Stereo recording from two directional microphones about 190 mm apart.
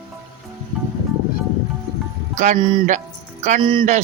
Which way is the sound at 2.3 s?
40° right (ahead or behind).